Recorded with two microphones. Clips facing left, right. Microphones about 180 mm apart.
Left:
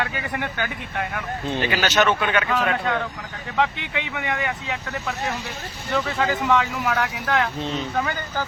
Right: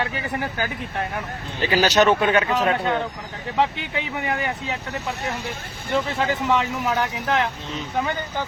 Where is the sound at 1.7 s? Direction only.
35° right (ahead or behind).